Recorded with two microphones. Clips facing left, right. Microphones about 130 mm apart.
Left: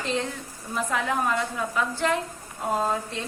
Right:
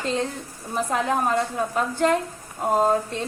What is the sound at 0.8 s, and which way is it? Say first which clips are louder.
A woman's voice: right 3 dB; 35° right (ahead or behind).